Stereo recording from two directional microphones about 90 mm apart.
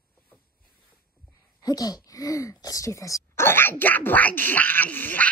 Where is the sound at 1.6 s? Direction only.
45° left (ahead or behind).